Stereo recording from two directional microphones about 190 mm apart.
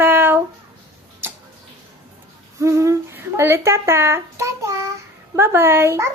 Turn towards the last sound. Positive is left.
turn(degrees=-15)  # may be behind; listen again after turning